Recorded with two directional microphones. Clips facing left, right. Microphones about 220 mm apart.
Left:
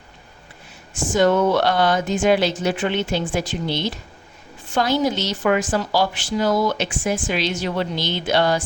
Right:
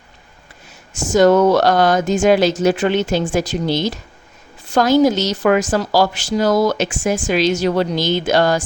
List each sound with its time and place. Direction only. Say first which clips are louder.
0.9 s a woman's voice: right 5 dB; 40° right (ahead or behind)